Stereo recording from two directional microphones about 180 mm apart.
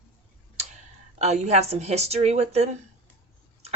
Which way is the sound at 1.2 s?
40° right (ahead or behind).